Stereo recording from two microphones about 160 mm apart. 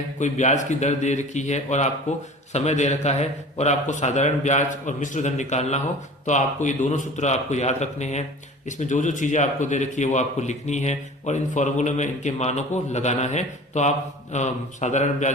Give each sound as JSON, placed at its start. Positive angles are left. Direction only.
{"t": 0.2, "sound": "a man's voice", "side_deg": 50}